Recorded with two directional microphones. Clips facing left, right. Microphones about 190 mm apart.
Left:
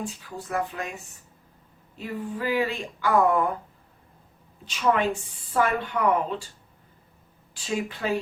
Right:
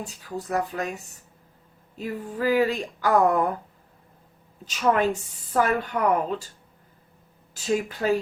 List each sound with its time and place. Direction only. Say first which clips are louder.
0.5 s speech: right 2 dB; 40° right (ahead or behind)
2.0 s speech: right 2 dB; 40° right (ahead or behind)
4.6 s speech: right 1 dB; 40° right (ahead or behind)
7.5 s speech: right 4 dB; 40° right (ahead or behind)